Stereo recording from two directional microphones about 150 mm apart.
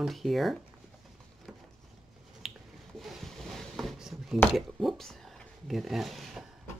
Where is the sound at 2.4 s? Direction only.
Centre (ahead or behind).